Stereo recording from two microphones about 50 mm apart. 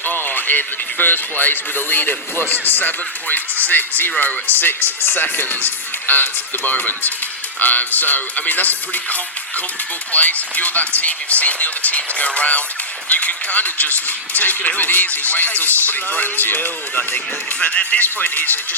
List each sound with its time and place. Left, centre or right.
0.0 s speech: left
17.6 s speech: left
18.0 s speech: left